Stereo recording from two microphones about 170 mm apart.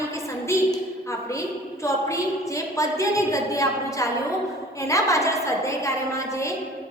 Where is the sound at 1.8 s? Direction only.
20° left (ahead or behind).